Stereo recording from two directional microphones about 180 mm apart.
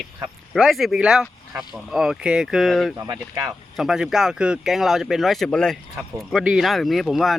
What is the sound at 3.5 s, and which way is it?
Speech, centre (ahead or behind).